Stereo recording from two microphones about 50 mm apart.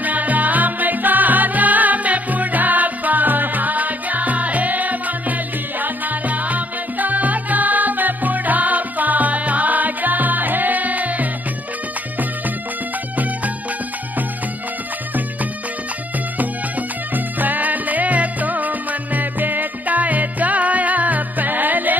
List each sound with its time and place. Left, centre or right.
0.0 s music: right
17.1 s music: right